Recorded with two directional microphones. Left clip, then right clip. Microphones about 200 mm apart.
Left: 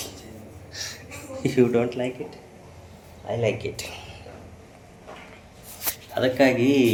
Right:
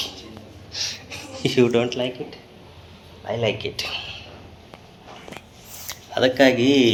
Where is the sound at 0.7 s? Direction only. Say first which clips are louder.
Right 7 dB; 5° left (ahead or behind).